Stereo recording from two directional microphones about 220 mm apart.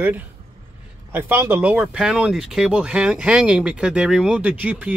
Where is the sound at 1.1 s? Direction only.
10° right (ahead or behind).